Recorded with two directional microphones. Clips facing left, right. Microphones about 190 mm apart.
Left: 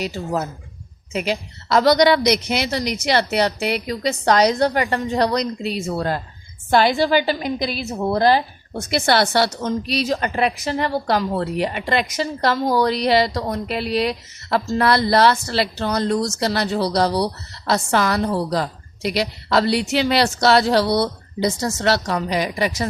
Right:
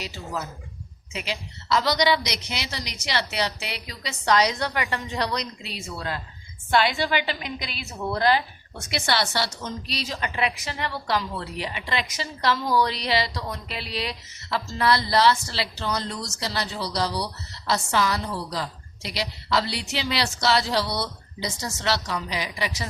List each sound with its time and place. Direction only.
0.0 s a woman's voice: 50° left (ahead or behind)